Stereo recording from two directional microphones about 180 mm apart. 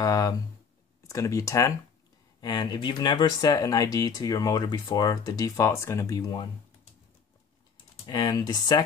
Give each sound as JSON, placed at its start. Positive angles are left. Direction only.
{"t": 0.0, "sound": "a sound", "side_deg": 20}
{"t": 1.0, "sound": "speech", "side_deg": 15}
{"t": 8.1, "sound": "speech", "side_deg": 25}